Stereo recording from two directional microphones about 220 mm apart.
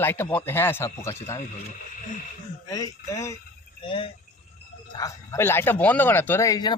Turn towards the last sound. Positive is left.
turn(degrees=20)  # may be behind; listen again after turning